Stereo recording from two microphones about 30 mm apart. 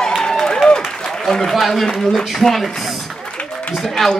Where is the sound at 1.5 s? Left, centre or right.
Centre.